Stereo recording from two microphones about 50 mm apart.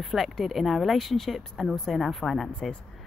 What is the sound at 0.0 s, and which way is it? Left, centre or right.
Speech, centre.